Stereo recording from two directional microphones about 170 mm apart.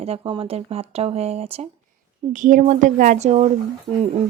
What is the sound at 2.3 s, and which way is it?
Speech, 50° right (ahead or behind).